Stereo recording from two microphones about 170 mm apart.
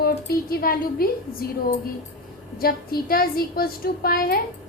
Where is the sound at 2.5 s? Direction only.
60° left (ahead or behind).